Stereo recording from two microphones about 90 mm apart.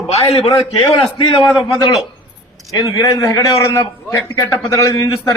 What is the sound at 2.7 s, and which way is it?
A man's voice, 40° left (ahead or behind).